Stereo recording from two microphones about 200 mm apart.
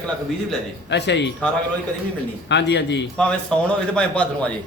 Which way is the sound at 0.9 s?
60° left (ahead or behind).